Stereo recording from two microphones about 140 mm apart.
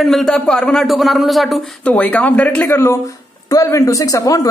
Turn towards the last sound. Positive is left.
turn(degrees=25)  # may be behind; listen again after turning